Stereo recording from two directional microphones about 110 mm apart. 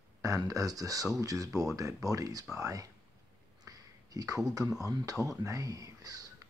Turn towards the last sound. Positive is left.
turn(degrees=-35)  # may be behind; listen again after turning